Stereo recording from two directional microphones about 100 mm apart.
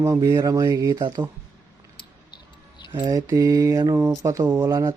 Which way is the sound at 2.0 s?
50° left (ahead or behind).